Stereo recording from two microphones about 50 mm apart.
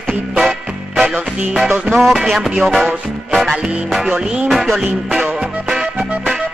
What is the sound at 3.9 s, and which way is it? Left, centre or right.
Music, centre.